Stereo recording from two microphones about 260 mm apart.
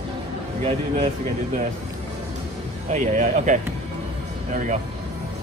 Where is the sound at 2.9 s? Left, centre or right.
Right.